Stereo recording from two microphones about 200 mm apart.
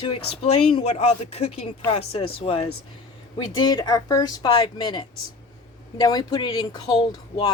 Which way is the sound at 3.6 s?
20° left (ahead or behind).